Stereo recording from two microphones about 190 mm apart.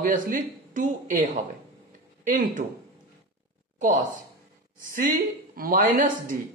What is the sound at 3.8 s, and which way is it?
Speech, 45° right (ahead or behind).